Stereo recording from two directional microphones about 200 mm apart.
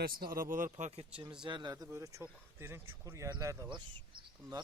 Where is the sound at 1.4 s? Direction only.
20° right (ahead or behind).